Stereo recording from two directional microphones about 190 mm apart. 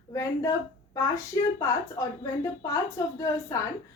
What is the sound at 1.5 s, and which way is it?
A woman's voice, 15° left (ahead or behind).